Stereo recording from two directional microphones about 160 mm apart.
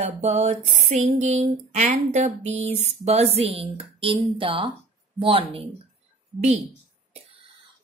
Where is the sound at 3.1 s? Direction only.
40° right (ahead or behind).